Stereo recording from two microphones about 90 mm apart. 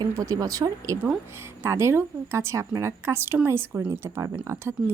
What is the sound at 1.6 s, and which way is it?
Speech, 30° right (ahead or behind).